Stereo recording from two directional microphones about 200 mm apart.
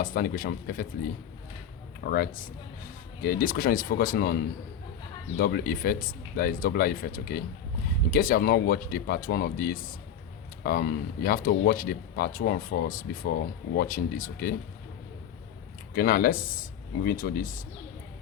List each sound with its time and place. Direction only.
0.0 s speech: 45° left (ahead or behind)
2.0 s speech: 50° left (ahead or behind)
5.4 s speech: 50° left (ahead or behind)
16.0 s speech: 45° left (ahead or behind)